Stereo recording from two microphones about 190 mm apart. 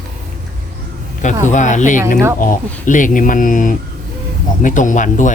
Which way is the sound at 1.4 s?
40° left (ahead or behind).